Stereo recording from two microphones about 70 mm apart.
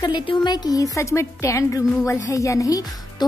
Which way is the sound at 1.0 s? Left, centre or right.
Left.